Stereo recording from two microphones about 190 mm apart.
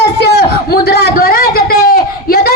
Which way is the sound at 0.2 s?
60° left (ahead or behind).